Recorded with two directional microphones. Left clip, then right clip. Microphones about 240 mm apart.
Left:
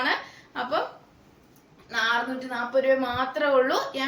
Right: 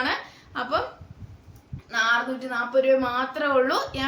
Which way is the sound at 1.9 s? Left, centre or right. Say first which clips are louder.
Right 2 dB; centre.